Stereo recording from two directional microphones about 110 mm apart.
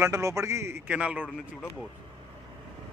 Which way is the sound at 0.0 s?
30° right (ahead or behind).